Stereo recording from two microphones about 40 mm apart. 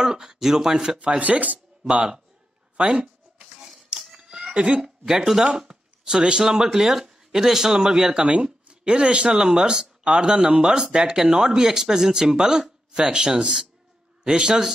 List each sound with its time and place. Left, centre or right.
0.0 s speech: centre
0.9 s speech: right
2.8 s a sound: right
5.0 s speech: centre